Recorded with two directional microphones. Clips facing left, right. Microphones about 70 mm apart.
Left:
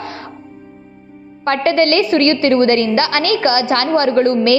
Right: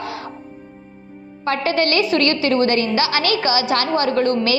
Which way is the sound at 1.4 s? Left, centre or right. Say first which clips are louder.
Left 5 dB; left.